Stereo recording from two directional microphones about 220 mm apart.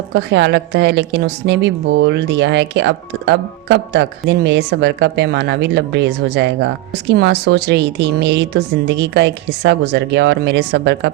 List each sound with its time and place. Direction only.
0.1 s a woman's voice: 50° right (ahead or behind)